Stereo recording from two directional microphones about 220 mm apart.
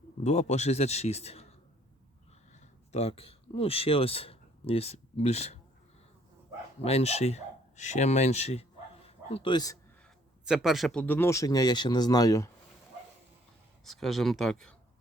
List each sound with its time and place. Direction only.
0.2 s a man's voice: 30° left (ahead or behind)
2.9 s speech: 30° left (ahead or behind)
6.8 s speech: 30° left (ahead or behind)
10.4 s speech: 5° right (ahead or behind); by 12.5 s 15° left (ahead or behind)
13.8 s speech: centre (ahead or behind)